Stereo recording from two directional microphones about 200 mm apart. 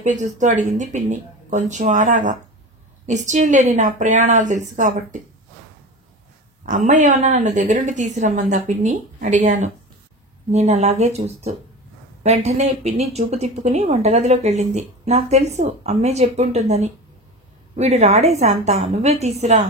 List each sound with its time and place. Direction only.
0.0 s speech: 35° right (ahead or behind)
6.6 s speech: 40° right (ahead or behind)